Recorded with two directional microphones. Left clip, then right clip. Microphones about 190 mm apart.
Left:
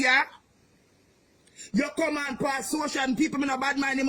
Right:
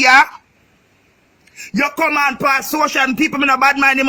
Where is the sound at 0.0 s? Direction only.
5° left (ahead or behind).